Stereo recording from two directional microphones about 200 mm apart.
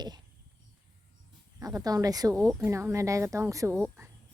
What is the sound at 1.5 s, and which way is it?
A woman's voice, 15° right (ahead or behind).